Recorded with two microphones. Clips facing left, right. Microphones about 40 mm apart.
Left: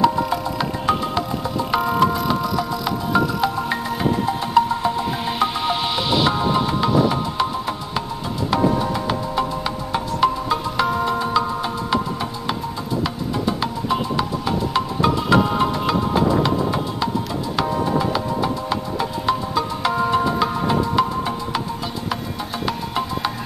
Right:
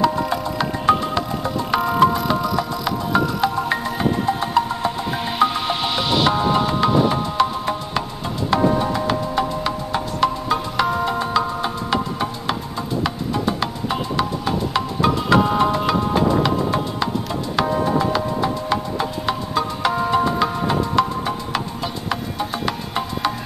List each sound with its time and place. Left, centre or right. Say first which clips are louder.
0.0 s music: left 1 dB; centre
6.9 s a sound: left 1 dB; centre
7.9 s music: right 1 dB; centre
13.0 s music: right 1 dB; centre